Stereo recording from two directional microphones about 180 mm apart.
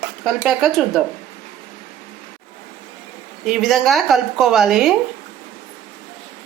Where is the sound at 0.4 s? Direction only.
Centre (ahead or behind).